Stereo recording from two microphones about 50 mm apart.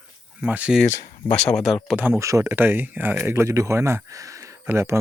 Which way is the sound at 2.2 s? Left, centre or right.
Right.